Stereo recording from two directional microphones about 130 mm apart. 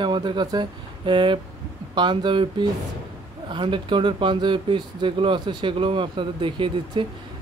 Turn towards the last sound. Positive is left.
turn(degrees=-40)  # may be behind; listen again after turning